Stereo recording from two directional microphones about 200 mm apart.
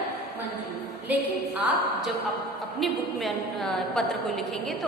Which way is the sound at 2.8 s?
Centre (ahead or behind).